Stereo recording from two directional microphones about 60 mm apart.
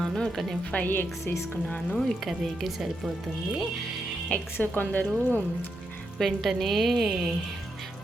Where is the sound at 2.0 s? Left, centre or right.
Centre.